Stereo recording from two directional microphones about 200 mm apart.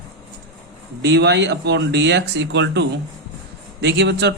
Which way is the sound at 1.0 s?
60° right (ahead or behind).